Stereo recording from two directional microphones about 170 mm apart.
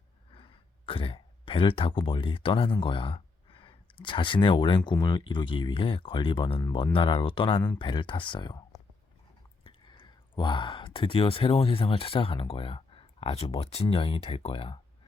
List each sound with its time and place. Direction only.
0.3 s speech: 30° left (ahead or behind)